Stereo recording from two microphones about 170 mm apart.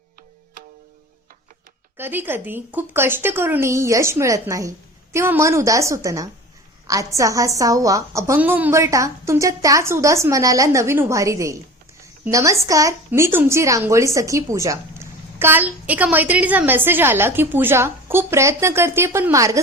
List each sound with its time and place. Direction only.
2.0 s a woman's voice: 10° right (ahead or behind)